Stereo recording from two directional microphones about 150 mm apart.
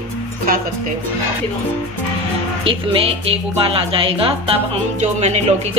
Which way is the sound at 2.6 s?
40° right (ahead or behind).